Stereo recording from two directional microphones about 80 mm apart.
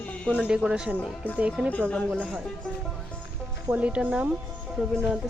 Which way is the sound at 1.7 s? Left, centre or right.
Centre.